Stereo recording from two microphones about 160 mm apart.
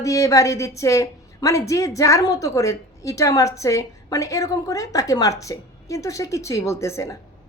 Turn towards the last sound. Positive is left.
turn(degrees=20)  # may be behind; listen again after turning